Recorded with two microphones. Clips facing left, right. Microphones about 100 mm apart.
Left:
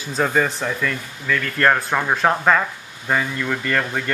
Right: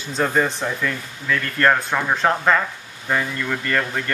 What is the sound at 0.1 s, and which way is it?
Speech, centre (ahead or behind).